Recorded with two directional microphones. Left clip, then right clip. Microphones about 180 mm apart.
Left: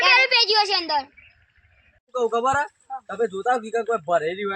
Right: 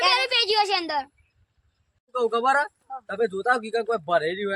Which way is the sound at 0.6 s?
20° right (ahead or behind).